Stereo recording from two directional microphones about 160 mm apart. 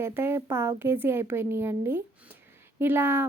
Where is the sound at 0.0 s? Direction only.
15° right (ahead or behind).